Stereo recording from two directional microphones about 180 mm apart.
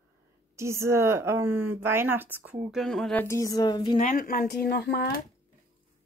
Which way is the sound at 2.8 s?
5° left (ahead or behind).